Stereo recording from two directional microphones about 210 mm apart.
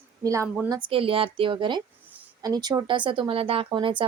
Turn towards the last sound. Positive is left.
turn(degrees=-25)  # may be behind; listen again after turning